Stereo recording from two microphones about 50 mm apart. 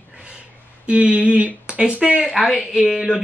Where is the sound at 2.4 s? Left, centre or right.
Centre.